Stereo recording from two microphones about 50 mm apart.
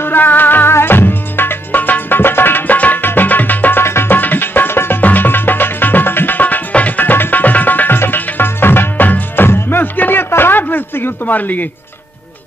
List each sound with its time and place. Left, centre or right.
0.0 s music: left
3.8 s tabla: left
4.1 s tabla: left
5.0 s music: left